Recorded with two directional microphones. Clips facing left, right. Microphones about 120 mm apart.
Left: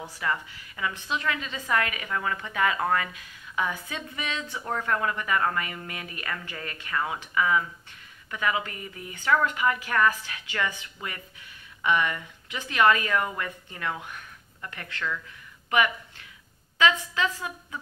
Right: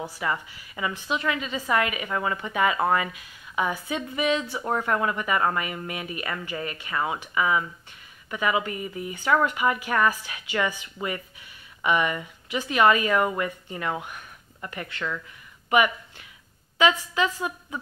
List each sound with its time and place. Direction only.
0.2 s a woman's voice: 20° right (ahead or behind)
16.7 s a woman's voice: 15° right (ahead or behind)